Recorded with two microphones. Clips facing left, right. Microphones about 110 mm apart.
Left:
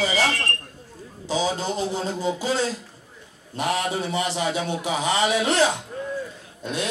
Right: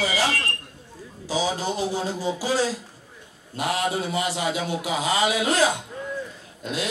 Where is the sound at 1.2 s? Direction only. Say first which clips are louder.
Left 1 dB; 25° left (ahead or behind).